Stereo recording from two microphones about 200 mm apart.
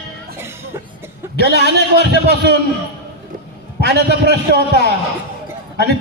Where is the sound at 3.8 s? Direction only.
55° right (ahead or behind).